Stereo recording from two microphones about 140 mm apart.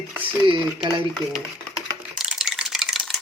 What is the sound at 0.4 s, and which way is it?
Speech, 35° right (ahead or behind).